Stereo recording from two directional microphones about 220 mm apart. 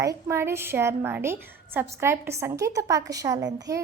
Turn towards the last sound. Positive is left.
turn(degrees=-15)  # may be behind; listen again after turning